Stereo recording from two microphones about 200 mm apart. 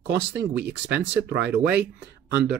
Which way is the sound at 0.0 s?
60° right (ahead or behind).